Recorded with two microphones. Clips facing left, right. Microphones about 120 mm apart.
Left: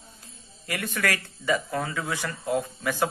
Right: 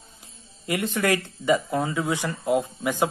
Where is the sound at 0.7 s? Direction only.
20° right (ahead or behind).